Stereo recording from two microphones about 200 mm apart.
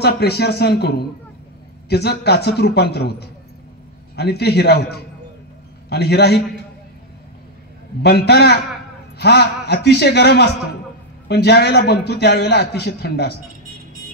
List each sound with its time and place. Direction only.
0.0 s a man's voice: 55° left (ahead or behind)
8.0 s a man's voice: 55° left (ahead or behind)